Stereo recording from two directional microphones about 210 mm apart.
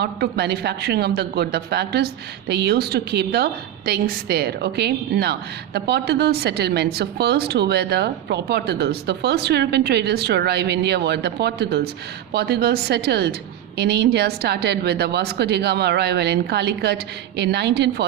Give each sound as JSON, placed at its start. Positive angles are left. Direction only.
{"t": 0.0, "sound": "a woman's voice", "side_deg": -50}